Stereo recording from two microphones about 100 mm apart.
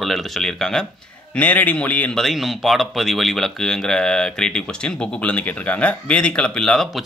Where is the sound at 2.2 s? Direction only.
Centre (ahead or behind).